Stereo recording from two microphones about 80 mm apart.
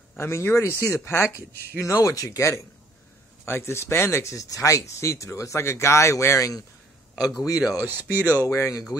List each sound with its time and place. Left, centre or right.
0.2 s a man's voice: left
7.7 s speech: right
8.5 s speech: left